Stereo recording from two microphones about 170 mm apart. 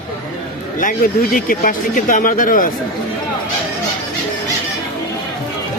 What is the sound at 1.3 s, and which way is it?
Speech, 55° left (ahead or behind).